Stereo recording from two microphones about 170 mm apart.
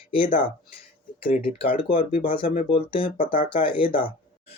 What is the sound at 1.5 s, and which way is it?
Speech, 30° left (ahead or behind).